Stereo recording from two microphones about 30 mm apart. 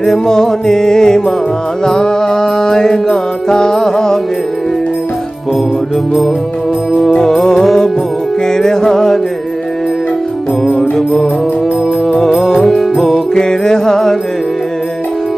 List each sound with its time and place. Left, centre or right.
0.0 s music: centre
7.2 s music: centre
10.8 s music: centre
12.6 s music: centre
13.0 s music: centre